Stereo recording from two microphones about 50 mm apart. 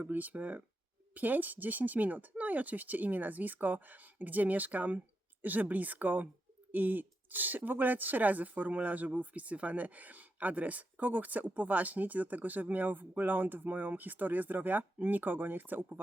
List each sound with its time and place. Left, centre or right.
0.0 s speech: right